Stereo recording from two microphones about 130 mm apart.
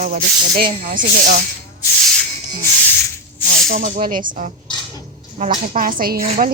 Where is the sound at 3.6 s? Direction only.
90° right.